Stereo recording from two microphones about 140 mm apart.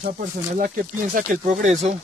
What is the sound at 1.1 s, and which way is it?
Speech, 70° right (ahead or behind).